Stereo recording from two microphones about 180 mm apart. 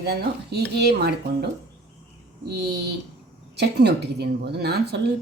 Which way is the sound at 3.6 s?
65° right (ahead or behind).